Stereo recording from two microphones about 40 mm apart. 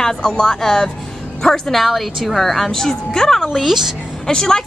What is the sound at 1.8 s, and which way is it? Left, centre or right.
A woman's voice, centre.